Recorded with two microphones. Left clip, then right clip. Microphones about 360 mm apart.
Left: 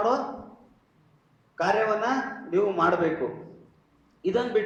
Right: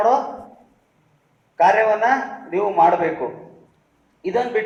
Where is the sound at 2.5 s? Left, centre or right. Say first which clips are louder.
Right 8 dB; right.